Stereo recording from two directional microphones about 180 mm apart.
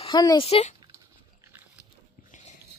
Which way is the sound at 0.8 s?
15° right (ahead or behind).